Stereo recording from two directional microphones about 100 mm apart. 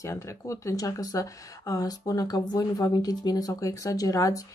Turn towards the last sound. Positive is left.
turn(degrees=35)  # may be behind; listen again after turning